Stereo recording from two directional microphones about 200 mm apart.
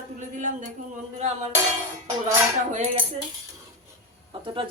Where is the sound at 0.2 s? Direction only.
40° right (ahead or behind).